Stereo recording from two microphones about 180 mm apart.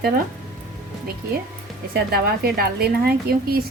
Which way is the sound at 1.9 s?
60° right (ahead or behind).